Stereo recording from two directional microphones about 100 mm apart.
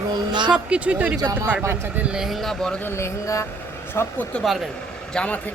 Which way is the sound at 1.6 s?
25° right (ahead or behind).